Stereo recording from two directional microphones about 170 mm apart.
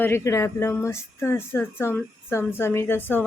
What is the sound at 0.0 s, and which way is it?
A woman's voice, 15° left (ahead or behind).